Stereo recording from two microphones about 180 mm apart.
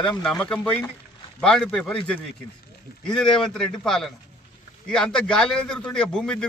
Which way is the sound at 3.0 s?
5° left (ahead or behind).